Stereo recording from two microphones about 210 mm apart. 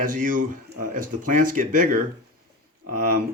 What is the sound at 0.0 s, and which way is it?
Speech, 40° right (ahead or behind).